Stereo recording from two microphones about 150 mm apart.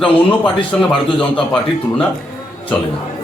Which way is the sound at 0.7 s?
10° left (ahead or behind).